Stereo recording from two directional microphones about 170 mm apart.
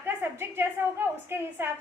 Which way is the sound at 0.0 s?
15° right (ahead or behind).